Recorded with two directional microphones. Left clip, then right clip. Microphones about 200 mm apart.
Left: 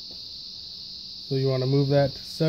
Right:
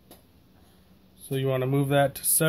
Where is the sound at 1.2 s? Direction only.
10° left (ahead or behind).